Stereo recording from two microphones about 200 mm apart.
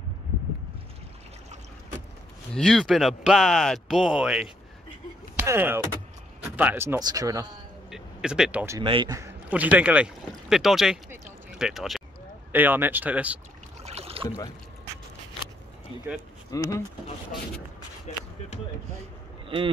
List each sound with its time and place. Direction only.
2.5 s speech: centre (ahead or behind)
5.3 s a sound: 10° right (ahead or behind)
6.5 s speech: 10° right (ahead or behind)
7.9 s a sound: 5° right (ahead or behind)
8.7 s speech: 25° right (ahead or behind)
9.5 s speech: 5° right (ahead or behind)
13.8 s boat: 30° right (ahead or behind)
16.4 s speech: 15° left (ahead or behind)
18.1 s basketball bounce: 35° left (ahead or behind)